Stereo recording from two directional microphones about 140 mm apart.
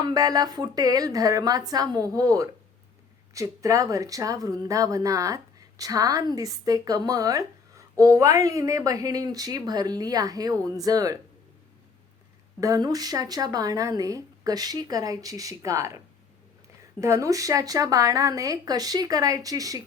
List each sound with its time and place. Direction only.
0.0 s speech: 25° right (ahead or behind)
12.5 s speech: 25° right (ahead or behind)
17.0 s speech: 20° right (ahead or behind)